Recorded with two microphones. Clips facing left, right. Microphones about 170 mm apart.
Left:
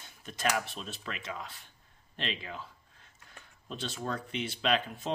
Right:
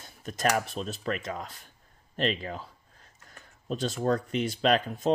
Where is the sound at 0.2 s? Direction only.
45° right (ahead or behind).